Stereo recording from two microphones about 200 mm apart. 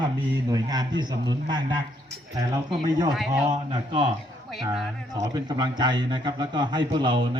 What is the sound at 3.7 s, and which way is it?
Speech, 20° right (ahead or behind).